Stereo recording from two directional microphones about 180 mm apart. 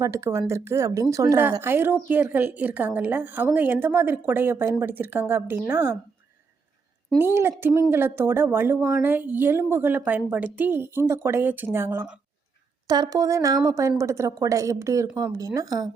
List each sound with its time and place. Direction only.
0.0 s a woman's voice: 15° right (ahead or behind)
7.2 s a woman's voice: 15° right (ahead or behind)